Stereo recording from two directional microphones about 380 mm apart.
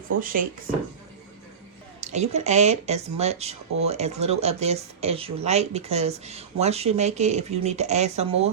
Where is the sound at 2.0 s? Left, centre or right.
Centre.